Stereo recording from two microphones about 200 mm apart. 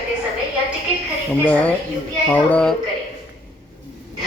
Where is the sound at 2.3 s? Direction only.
5° left (ahead or behind).